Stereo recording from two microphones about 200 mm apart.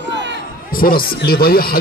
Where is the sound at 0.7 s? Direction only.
45° left (ahead or behind).